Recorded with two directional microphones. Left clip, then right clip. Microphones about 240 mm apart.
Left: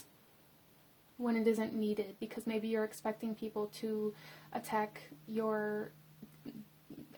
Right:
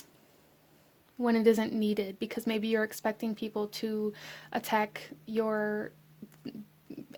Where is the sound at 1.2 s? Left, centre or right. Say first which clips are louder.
Right 7 dB; right.